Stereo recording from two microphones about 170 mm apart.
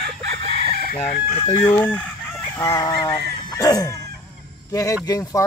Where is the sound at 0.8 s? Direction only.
50° left (ahead or behind).